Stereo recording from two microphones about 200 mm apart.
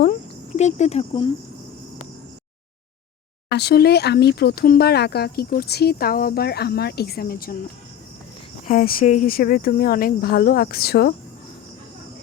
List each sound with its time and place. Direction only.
0.0 s cricket: 35° left (ahead or behind)
3.5 s speech: 55° left (ahead or behind)
8.6 s speech: 45° left (ahead or behind)